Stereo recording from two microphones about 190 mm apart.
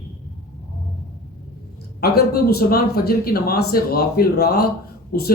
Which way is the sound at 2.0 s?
55° left (ahead or behind).